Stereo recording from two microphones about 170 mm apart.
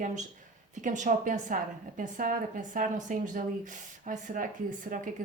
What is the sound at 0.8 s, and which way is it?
A woman's voice, 50° right (ahead or behind).